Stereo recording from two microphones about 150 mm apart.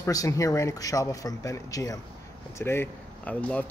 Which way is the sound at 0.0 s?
20° left (ahead or behind).